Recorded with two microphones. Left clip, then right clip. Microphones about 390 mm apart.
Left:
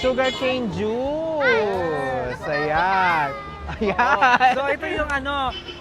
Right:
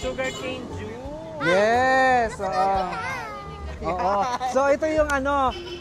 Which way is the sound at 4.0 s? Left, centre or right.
Left.